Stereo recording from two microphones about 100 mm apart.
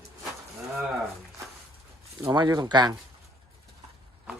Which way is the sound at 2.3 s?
50° right (ahead or behind).